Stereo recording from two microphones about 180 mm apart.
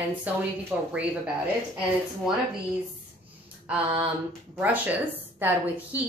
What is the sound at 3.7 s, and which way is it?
A woman's voice, 5° right (ahead or behind).